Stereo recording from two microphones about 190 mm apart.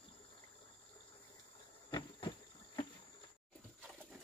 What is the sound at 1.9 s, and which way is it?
Insect, 25° left (ahead or behind).